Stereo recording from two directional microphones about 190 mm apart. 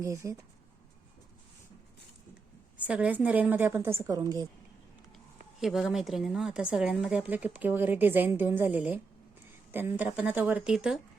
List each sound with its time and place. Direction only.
0.0 s a woman's voice: 15° right (ahead or behind)
2.8 s a woman's voice: 5° right (ahead or behind)
5.5 s a woman's voice: centre (ahead or behind)